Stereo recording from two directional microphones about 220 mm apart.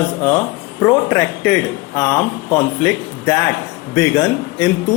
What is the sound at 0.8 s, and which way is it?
Speech, 10° left (ahead or behind).